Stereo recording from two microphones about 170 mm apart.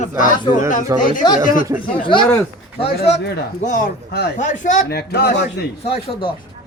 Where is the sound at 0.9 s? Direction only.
20° right (ahead or behind).